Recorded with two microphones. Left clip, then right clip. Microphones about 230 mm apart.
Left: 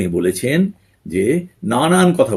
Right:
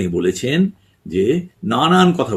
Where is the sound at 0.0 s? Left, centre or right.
Centre.